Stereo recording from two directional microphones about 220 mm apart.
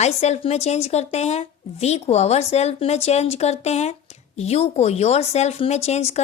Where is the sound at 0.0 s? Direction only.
30° left (ahead or behind).